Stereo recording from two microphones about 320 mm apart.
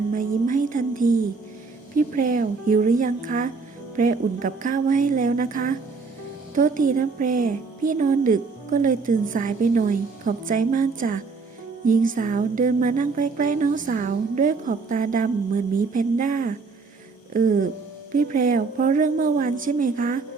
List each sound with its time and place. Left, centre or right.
0.1 s a woman's voice: right